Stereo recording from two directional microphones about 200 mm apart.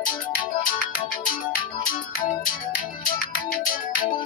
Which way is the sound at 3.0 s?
45° left (ahead or behind).